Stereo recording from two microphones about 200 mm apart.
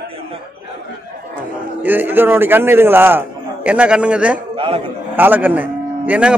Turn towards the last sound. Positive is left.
turn(degrees=-5)  # may be behind; listen again after turning